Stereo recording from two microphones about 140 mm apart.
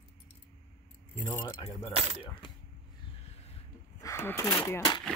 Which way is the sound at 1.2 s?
20° left (ahead or behind).